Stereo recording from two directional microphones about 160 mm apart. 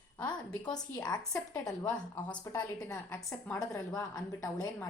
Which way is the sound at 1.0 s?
25° left (ahead or behind).